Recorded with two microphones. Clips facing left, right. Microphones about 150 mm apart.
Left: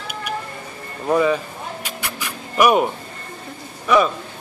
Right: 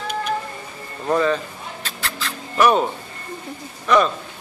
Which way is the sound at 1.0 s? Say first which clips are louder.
Left 2 dB; 10° left (ahead or behind).